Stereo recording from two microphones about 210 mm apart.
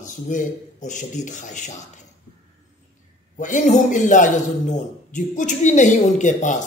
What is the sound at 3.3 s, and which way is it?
A man's voice, 35° left (ahead or behind).